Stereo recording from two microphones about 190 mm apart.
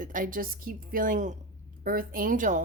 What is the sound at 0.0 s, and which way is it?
Speech, 45° right (ahead or behind).